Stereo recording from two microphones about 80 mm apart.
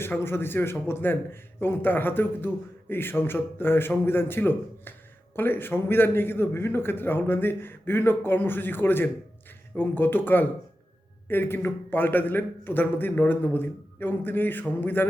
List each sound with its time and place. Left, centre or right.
0.0 s a man's voice: left